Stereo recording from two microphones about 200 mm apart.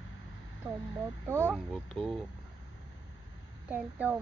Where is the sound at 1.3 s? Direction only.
10° right (ahead or behind).